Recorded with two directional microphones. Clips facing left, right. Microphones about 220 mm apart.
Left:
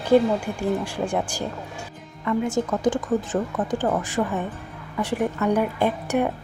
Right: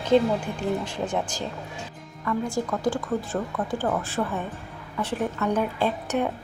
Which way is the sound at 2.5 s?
20° left (ahead or behind).